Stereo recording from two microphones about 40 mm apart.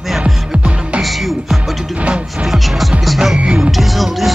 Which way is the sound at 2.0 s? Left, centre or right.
Right.